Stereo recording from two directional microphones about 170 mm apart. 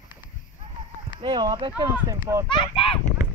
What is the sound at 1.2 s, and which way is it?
Speech, 25° right (ahead or behind).